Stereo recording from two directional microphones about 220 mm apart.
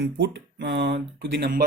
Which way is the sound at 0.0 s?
50° right (ahead or behind).